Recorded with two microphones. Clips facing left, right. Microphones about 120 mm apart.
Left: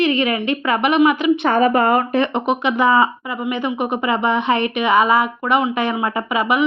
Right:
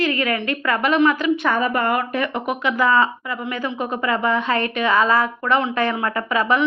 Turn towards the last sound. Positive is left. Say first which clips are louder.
# left 1 dB
turn(degrees=15)  # may be behind; listen again after turning